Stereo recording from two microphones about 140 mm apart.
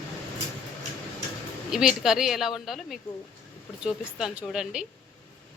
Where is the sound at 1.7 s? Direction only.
5° right (ahead or behind).